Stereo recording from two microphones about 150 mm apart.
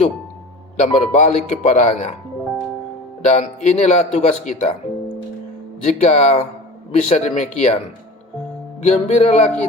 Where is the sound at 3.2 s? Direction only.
50° left (ahead or behind).